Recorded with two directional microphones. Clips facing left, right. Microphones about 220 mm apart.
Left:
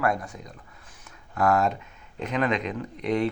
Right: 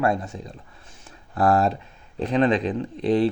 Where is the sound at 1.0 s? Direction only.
35° right (ahead or behind).